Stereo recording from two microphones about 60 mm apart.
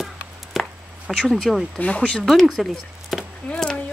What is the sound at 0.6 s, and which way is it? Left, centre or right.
Chopping, centre.